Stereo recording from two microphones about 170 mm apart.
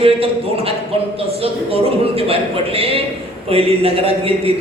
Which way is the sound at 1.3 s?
35° right (ahead or behind).